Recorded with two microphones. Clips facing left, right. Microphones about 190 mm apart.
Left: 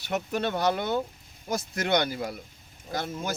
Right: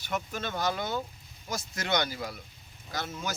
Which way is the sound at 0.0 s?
65° left (ahead or behind).